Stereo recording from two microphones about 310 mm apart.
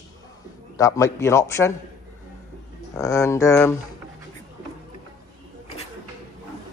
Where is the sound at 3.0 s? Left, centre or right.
Centre.